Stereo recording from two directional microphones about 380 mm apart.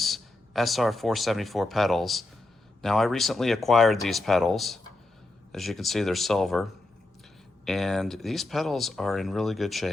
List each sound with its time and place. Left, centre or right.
0.0 s speech: centre